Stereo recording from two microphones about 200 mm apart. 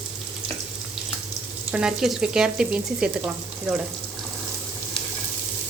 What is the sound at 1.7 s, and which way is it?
Frying, 5° right (ahead or behind).